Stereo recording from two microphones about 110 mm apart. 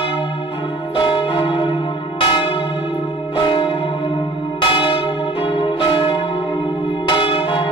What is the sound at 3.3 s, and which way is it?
Church bell, 45° left (ahead or behind).